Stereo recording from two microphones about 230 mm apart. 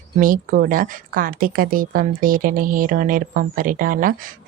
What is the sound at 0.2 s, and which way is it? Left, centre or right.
Speech, right.